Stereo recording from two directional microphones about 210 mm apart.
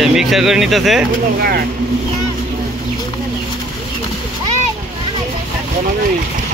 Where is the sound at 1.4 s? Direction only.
50° right (ahead or behind).